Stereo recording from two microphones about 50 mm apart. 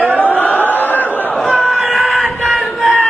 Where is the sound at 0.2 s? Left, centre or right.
Left.